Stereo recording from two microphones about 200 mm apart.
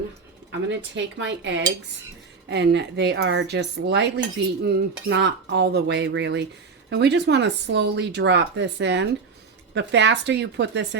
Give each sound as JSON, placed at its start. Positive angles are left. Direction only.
{"t": 0.5, "sound": "speech", "side_deg": -60}